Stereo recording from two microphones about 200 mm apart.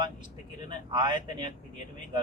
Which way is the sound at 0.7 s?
25° right (ahead or behind).